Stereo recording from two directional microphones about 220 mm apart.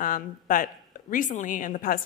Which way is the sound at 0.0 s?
40° left (ahead or behind).